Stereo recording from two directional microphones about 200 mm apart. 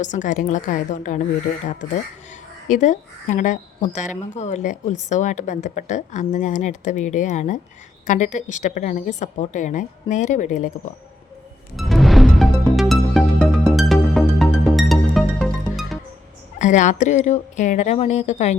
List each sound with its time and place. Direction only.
0.0 s speech: 40° left (ahead or behind)
2.6 s speech: 40° left (ahead or behind)
11.8 s music: centre (ahead or behind)
16.6 s speech: 40° left (ahead or behind)